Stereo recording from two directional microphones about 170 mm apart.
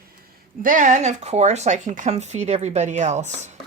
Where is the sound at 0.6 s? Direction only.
50° right (ahead or behind).